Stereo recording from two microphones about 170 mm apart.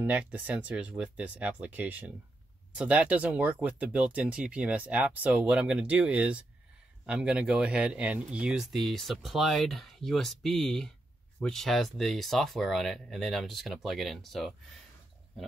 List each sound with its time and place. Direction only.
0.0 s speech: 10° right (ahead or behind)